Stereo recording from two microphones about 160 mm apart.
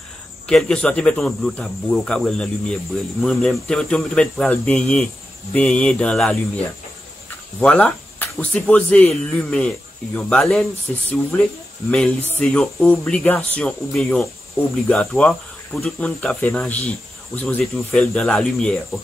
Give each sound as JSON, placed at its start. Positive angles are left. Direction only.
{"t": 0.5, "sound": "speech", "side_deg": 5}
{"t": 7.6, "sound": "speech", "side_deg": 10}